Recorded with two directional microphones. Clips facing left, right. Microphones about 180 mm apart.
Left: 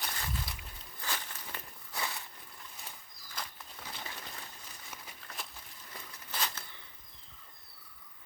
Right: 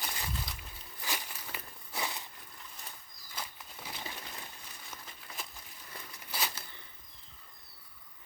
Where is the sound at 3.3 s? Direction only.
10° right (ahead or behind).